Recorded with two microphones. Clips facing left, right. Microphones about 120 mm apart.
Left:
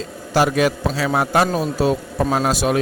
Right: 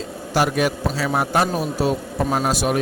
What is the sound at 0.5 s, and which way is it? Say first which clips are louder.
Speech: left 2 dB; 90° left.